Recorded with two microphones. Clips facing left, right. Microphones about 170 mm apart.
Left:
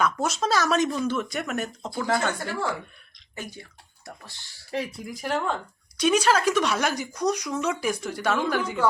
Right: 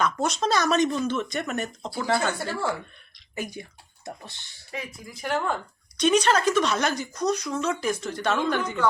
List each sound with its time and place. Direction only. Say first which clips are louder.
0.0 s speech: even; 5° left (ahead or behind)
1.9 s speech: even; 5° right (ahead or behind)
3.3 s speech: right 5 dB; 15° right (ahead or behind)
4.7 s speech: left 6 dB; 30° left (ahead or behind)
5.1 s speech: right 1 dB; centre (ahead or behind)